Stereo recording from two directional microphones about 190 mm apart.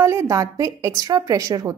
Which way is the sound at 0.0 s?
15° right (ahead or behind).